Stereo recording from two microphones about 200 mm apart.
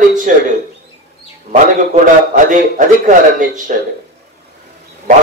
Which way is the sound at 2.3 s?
40° right (ahead or behind).